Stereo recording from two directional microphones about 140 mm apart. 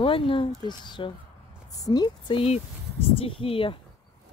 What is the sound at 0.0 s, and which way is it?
Speech, 40° left (ahead or behind).